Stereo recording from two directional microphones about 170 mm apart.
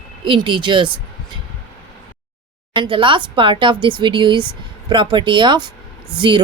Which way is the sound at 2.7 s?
30° right (ahead or behind).